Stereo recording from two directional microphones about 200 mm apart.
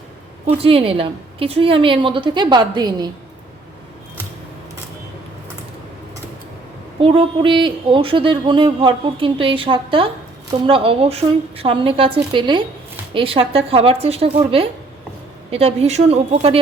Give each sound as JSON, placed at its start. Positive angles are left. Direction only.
{"t": 0.4, "sound": "speech", "side_deg": -30}
{"t": 7.0, "sound": "a woman's voice", "side_deg": -25}